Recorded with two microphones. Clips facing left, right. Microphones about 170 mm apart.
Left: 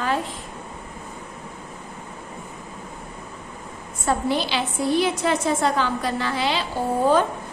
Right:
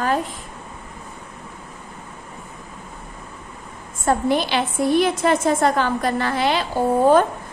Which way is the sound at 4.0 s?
50° right (ahead or behind).